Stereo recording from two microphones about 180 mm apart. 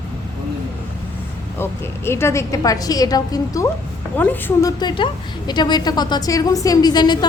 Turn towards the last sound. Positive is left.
turn(degrees=25)  # may be behind; listen again after turning